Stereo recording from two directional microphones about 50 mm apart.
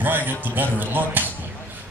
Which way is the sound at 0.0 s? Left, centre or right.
Right.